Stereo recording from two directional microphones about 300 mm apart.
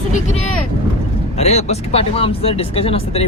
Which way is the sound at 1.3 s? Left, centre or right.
Left.